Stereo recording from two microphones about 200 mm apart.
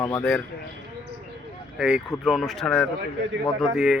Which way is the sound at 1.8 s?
5° right (ahead or behind).